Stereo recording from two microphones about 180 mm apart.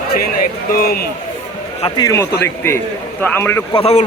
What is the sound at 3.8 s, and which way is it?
Speech, 35° left (ahead or behind).